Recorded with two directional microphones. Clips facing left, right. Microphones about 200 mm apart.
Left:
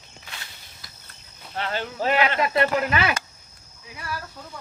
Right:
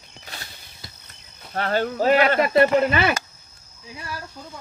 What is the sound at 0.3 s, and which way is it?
Music, 35° right (ahead or behind).